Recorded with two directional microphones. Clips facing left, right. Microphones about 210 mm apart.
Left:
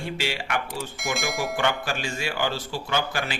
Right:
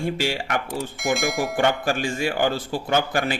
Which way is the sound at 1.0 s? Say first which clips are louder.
Right 5 dB; centre (ahead or behind).